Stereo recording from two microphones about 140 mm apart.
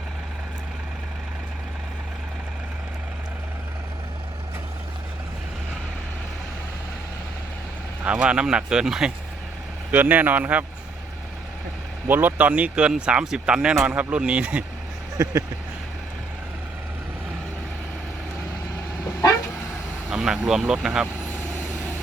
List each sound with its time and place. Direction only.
8.0 s speech: 10° right (ahead or behind)
12.0 s speech: 15° right (ahead or behind)
15.2 s speech: 20° right (ahead or behind)
20.1 s speech: 5° right (ahead or behind)